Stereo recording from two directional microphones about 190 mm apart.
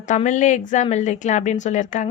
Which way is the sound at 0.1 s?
40° left (ahead or behind).